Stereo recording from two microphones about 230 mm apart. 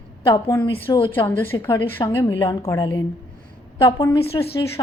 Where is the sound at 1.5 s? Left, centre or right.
Centre.